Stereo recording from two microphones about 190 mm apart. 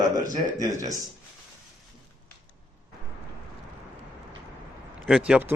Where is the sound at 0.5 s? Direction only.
15° right (ahead or behind).